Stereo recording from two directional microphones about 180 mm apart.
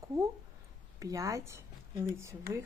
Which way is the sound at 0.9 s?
20° right (ahead or behind).